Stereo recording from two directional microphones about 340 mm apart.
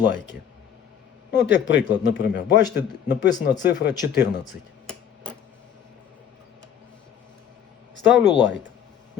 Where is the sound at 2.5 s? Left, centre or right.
Centre.